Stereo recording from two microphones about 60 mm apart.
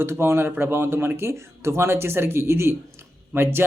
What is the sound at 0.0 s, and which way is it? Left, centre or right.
Speech, right.